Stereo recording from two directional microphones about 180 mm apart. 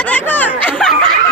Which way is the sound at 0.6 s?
5° left (ahead or behind).